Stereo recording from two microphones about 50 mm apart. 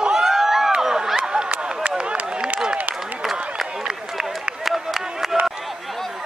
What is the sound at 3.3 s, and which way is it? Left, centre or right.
Run, centre.